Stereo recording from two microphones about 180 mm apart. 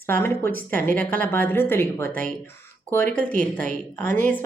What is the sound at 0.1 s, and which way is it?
A woman's voice, 10° left (ahead or behind).